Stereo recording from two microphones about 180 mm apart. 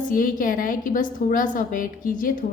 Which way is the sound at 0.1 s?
50° left (ahead or behind).